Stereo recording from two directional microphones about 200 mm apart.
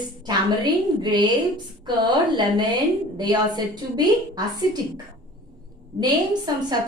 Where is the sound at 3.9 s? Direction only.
20° right (ahead or behind).